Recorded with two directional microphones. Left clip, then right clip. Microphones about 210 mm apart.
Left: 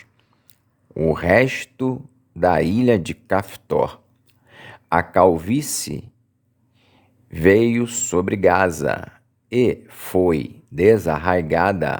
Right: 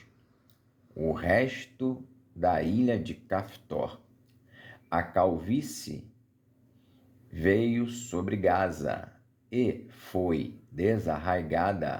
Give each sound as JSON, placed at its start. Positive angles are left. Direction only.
{"t": 0.9, "sound": "speech", "side_deg": 40}
{"t": 7.3, "sound": "speech", "side_deg": 40}